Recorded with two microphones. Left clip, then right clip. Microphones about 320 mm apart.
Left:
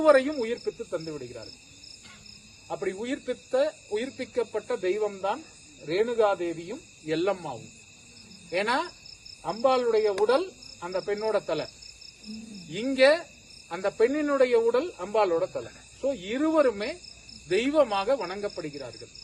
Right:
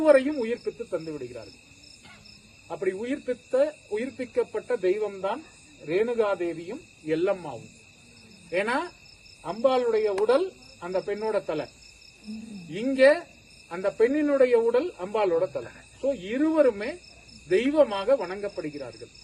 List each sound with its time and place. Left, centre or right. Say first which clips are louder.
0.0 s speech: right 1 dB; centre
2.6 s speech: right 2 dB; centre
12.7 s speech: right 1 dB; centre